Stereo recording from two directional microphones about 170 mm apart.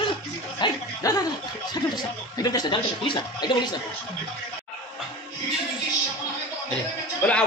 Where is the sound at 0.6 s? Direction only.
20° left (ahead or behind).